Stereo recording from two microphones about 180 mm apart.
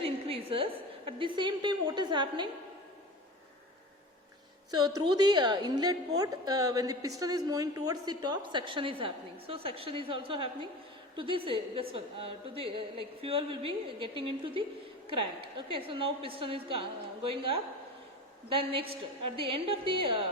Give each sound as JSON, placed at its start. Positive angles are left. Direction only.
{"t": 0.0, "sound": "a woman's voice", "side_deg": -30}
{"t": 4.9, "sound": "a woman's voice", "side_deg": -20}